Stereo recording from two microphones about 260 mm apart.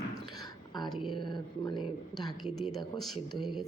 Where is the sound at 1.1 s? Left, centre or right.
Centre.